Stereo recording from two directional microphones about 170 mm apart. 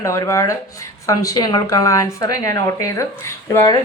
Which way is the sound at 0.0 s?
20° left (ahead or behind).